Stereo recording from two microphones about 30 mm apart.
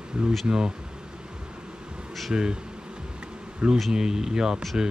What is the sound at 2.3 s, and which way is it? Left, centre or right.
Speech, right.